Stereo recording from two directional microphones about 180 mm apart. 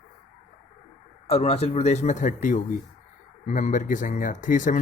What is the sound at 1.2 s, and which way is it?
Speech, 35° left (ahead or behind).